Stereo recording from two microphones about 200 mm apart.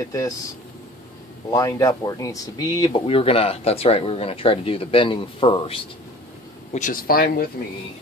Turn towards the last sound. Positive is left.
turn(degrees=45)  # may be behind; listen again after turning